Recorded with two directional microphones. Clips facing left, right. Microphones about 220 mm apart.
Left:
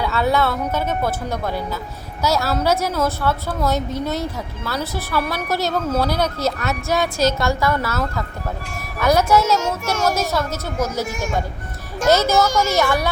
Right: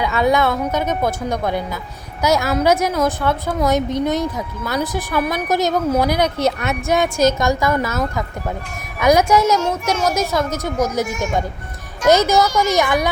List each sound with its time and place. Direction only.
0.0 s a woman's voice: 15° right (ahead or behind)
12.0 s a woman's voice: 15° right (ahead or behind)